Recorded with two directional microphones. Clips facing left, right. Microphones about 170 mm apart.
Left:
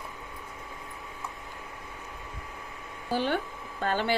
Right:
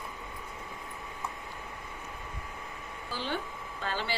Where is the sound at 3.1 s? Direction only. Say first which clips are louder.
Left 7 dB; 55° left (ahead or behind).